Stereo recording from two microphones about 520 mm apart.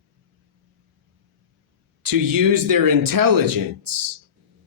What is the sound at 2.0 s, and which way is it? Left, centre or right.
Speech, right.